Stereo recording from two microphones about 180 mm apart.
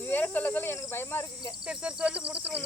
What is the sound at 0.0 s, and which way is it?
Speech, 10° left (ahead or behind).